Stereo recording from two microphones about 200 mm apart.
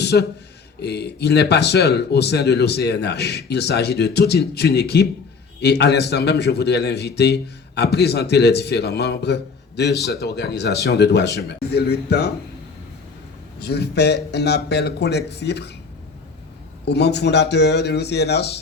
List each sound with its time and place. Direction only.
0.0 s a man's voice: 55° left (ahead or behind)
13.6 s a man's voice: 55° left (ahead or behind)
16.8 s a man's voice: 55° left (ahead or behind)